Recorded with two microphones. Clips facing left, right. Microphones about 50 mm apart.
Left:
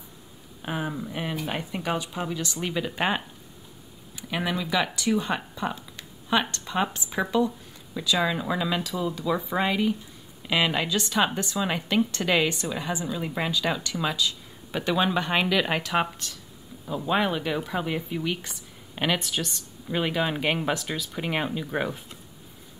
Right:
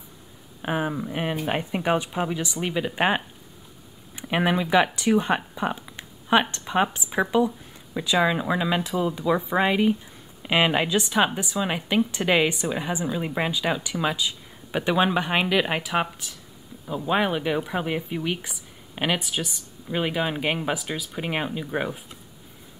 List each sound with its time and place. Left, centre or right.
0.6 s speech: right
1.3 s speech: right; by 3.2 s centre
4.1 s speech: right; by 22.0 s centre